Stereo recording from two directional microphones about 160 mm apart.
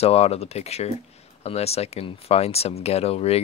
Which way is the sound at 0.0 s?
40° left (ahead or behind).